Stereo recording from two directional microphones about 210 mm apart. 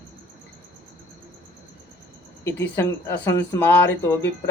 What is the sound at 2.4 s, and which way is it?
Speech, 10° left (ahead or behind).